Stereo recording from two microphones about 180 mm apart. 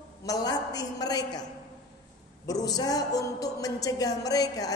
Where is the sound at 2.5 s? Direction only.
20° left (ahead or behind).